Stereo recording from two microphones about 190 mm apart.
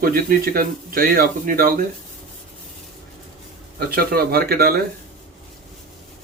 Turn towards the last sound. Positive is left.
turn(degrees=-55)  # may be behind; listen again after turning